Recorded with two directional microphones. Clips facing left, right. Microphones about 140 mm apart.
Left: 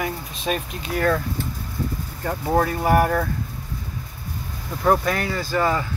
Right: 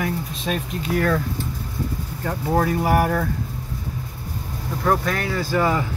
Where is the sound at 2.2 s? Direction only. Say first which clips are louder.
Even; centre (ahead or behind).